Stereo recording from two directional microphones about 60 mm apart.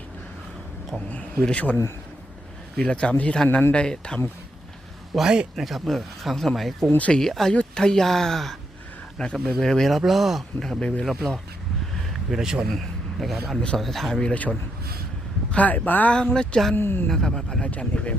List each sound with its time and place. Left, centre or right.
1.5 s speech: left
2.7 s speech: centre
5.1 s a man's voice: centre
5.6 s speech: centre
6.9 s speech: left
7.2 s speech: centre
12.3 s a man's voice: centre
12.6 s speech: centre
14.2 s speech: left
15.5 s speech: left
16.3 s speech: centre
16.7 s speech: left
17.1 s speech: centre
17.6 s speech: left